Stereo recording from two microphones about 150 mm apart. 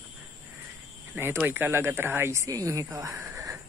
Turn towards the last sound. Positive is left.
turn(degrees=-20)  # may be behind; listen again after turning